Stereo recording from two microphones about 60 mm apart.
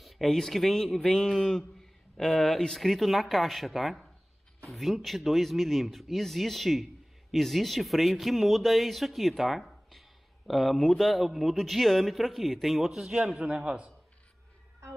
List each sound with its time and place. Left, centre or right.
0.0 s speech: centre
13.2 s a man's voice: centre